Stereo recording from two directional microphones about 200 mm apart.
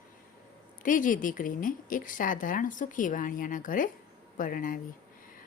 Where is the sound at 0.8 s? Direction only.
40° left (ahead or behind).